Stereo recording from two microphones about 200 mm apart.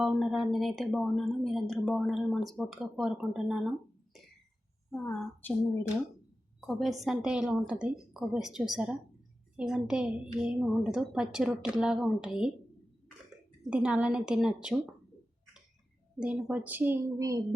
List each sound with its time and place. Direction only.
0.0 s speech: centre (ahead or behind)
5.2 s a woman's voice: 5° left (ahead or behind)
13.7 s speech: 5° right (ahead or behind)
16.2 s a woman's voice: 5° right (ahead or behind)